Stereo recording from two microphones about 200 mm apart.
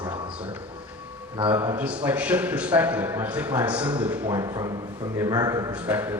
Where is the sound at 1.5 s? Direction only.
10° right (ahead or behind).